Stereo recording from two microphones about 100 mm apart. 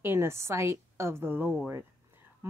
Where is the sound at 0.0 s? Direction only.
25° right (ahead or behind).